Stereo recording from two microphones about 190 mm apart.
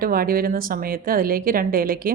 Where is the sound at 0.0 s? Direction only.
50° right (ahead or behind).